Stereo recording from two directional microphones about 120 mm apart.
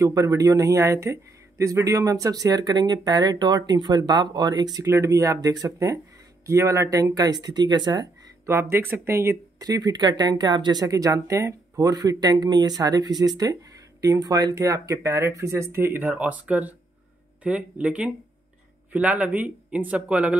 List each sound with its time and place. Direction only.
0.0 s speech: 30° right (ahead or behind)
4.7 s speech: 25° right (ahead or behind)
8.5 s speech: 20° right (ahead or behind)